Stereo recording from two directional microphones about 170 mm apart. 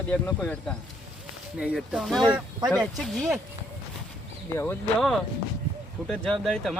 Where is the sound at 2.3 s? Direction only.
25° right (ahead or behind).